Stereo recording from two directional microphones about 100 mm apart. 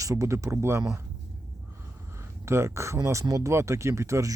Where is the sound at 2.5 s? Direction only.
25° right (ahead or behind).